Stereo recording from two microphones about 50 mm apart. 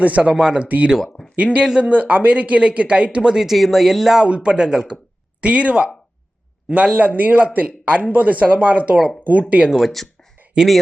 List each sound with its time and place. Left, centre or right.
0.0 s speech: right; by 4.2 s centre
4.2 s speech: centre
5.4 s speech: right
9.6 s speech: centre
10.5 s speech: centre